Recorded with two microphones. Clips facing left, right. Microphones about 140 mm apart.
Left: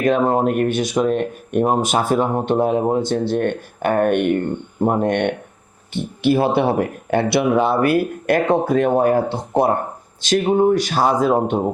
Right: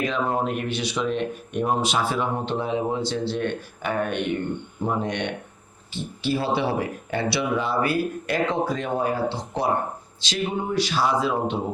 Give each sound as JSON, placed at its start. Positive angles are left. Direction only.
{"t": 0.0, "sound": "speech", "side_deg": 50}